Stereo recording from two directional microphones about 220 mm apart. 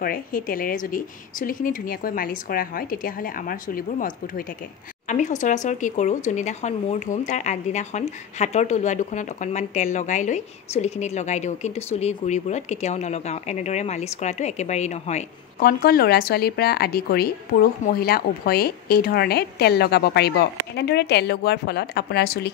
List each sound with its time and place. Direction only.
0.0 s a woman's voice: 40° left (ahead or behind)